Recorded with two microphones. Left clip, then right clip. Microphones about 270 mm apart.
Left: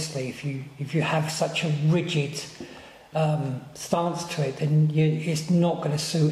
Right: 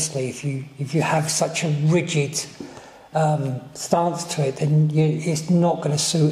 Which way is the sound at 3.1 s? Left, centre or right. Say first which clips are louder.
Right 5 dB; right.